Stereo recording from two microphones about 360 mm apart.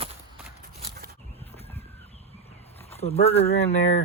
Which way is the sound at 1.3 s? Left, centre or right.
Centre.